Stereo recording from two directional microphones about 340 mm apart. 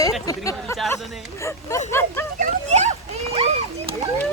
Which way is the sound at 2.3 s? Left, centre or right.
Centre.